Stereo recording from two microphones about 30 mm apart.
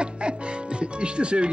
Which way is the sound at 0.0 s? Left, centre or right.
Right.